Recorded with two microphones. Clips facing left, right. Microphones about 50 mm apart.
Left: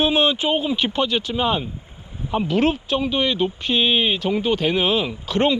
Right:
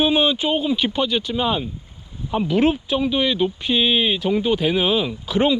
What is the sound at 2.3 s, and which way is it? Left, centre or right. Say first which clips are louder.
Speech: right 1 dB; left.